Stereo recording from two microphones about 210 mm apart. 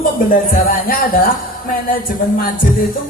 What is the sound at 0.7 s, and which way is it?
Speech, 40° left (ahead or behind).